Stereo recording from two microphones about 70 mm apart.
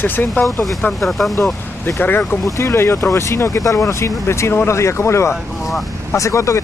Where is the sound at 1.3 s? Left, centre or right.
Left.